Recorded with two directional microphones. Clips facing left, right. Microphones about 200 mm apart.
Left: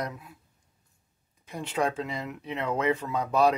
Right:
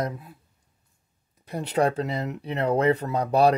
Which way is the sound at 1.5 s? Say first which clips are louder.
Right 5 dB; 35° right (ahead or behind).